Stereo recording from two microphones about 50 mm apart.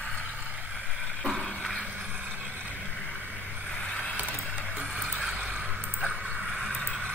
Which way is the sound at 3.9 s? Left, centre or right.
Left.